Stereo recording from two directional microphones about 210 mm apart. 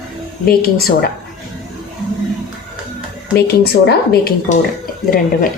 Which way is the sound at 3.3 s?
50° left (ahead or behind).